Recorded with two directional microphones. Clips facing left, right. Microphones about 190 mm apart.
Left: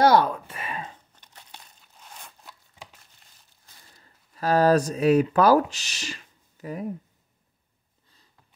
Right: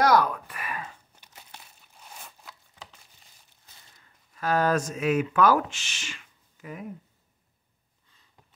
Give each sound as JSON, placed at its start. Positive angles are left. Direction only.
{"t": 0.0, "sound": "a sound", "side_deg": 30}
{"t": 0.9, "sound": "crumpling", "side_deg": -10}
{"t": 4.0, "sound": "speech", "side_deg": 35}